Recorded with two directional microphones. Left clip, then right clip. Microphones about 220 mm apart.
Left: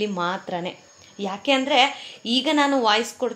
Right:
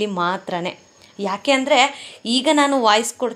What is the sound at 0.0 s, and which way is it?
A woman's voice, 30° right (ahead or behind).